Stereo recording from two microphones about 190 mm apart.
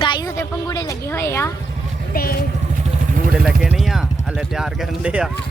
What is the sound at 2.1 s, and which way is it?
Speech, 50° left (ahead or behind).